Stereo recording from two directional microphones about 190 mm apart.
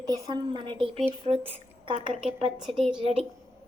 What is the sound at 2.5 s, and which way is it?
Speech, centre (ahead or behind).